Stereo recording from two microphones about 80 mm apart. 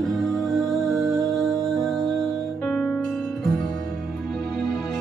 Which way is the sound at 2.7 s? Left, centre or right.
Centre.